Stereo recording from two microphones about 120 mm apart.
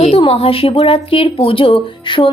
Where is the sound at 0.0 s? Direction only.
55° left (ahead or behind).